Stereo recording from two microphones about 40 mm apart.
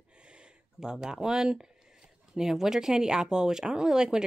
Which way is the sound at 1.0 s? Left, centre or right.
Centre.